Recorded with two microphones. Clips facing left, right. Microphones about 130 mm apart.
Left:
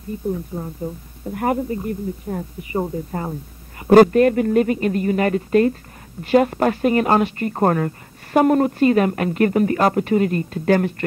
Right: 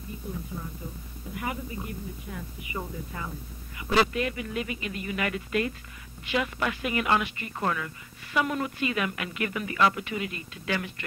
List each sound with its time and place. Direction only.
0.6 s speech: 50° left (ahead or behind)